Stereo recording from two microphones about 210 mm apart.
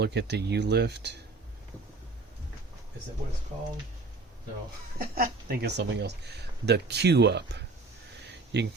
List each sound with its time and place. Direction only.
0.0 s speech: 55° right (ahead or behind)
4.9 s speech: 45° right (ahead or behind)